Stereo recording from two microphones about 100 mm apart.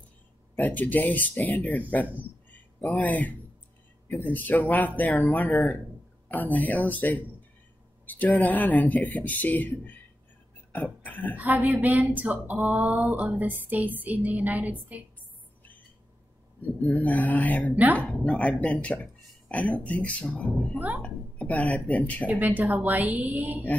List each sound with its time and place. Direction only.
0.6 s speech: 15° left (ahead or behind)
10.7 s a sound: 20° left (ahead or behind)
11.3 s speech: 15° right (ahead or behind)
16.8 s speech: 15° left (ahead or behind)
22.4 s speech: 15° right (ahead or behind)